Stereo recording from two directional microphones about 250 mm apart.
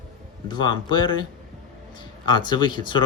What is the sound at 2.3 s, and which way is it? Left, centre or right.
Speech, centre.